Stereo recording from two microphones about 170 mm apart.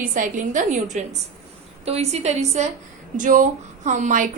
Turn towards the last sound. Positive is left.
turn(degrees=-45)  # may be behind; listen again after turning